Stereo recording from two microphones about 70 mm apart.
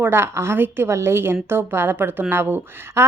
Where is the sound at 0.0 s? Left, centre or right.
Right.